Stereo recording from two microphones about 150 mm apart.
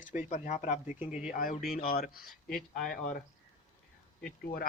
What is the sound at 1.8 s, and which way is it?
Speech, 75° left (ahead or behind).